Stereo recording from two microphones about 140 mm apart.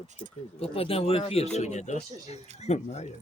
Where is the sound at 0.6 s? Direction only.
45° left (ahead or behind).